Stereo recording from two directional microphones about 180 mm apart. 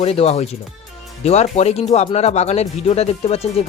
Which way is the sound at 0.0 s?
35° left (ahead or behind).